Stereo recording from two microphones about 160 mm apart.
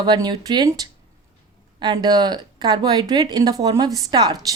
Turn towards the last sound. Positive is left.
turn(degrees=-25)  # may be behind; listen again after turning